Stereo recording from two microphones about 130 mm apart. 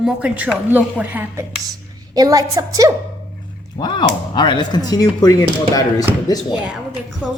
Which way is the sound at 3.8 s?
35° left (ahead or behind).